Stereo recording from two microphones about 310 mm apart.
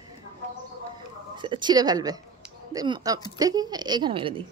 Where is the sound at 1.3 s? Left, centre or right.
Centre.